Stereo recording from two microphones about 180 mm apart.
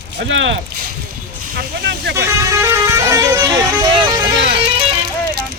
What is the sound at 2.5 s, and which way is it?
Vehicle, 15° right (ahead or behind).